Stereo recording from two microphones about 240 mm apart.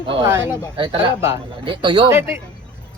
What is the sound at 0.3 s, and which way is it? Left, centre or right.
Speech, centre.